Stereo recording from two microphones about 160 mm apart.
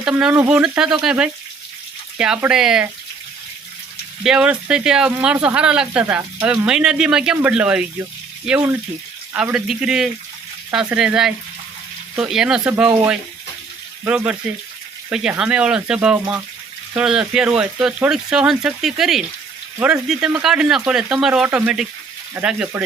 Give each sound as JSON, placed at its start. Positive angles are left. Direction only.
{"t": 0.0, "sound": "speech", "side_deg": -5}
{"t": 4.2, "sound": "speech", "side_deg": -5}
{"t": 9.3, "sound": "speech", "side_deg": -5}
{"t": 14.0, "sound": "speech", "side_deg": -10}